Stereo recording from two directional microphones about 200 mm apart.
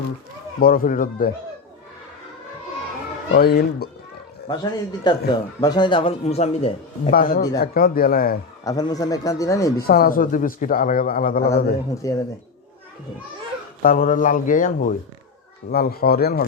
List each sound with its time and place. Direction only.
0.6 s a man's voice: 45° left (ahead or behind)
3.3 s a man's voice: 50° left (ahead or behind)
4.4 s a man's voice: 20° left (ahead or behind)
7.1 s a man's voice: 45° left (ahead or behind)
8.6 s speech: 20° left (ahead or behind)
9.8 s a man's voice: 45° left (ahead or behind)
12.0 s speech: 15° left (ahead or behind)
13.8 s a man's voice: 40° left (ahead or behind)